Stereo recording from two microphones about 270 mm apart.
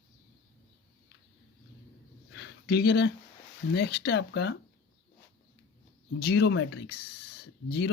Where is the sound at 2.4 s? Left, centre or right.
Left.